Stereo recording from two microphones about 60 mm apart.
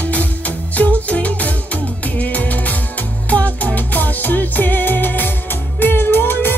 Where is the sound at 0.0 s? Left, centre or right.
Left.